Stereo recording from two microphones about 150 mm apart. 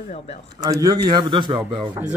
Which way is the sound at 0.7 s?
25° right (ahead or behind).